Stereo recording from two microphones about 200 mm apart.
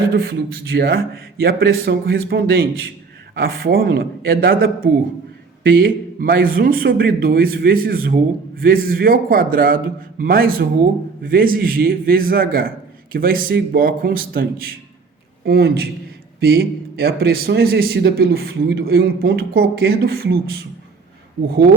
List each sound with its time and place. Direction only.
0.1 s a man's voice: 50° right (ahead or behind)